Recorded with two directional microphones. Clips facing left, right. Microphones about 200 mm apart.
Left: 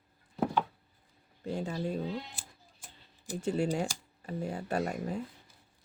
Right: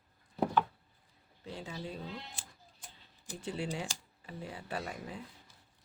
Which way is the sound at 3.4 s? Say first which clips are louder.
Left 7 dB; 45° left (ahead or behind).